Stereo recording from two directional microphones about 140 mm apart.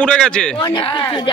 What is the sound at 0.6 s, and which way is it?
Speech, 35° left (ahead or behind).